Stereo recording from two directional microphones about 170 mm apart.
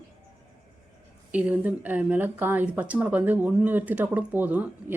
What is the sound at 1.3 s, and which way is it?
Speech, 10° right (ahead or behind).